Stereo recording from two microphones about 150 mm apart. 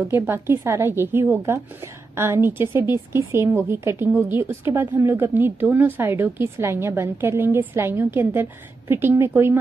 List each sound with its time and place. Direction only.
0.1 s a woman's voice: 15° right (ahead or behind)